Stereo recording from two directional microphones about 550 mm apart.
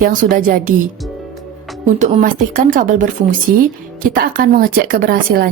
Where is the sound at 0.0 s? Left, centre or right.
Centre.